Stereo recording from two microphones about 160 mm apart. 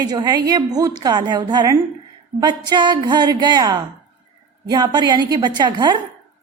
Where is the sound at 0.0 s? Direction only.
25° right (ahead or behind).